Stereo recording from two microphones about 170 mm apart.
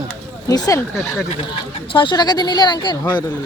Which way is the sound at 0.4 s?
20° left (ahead or behind).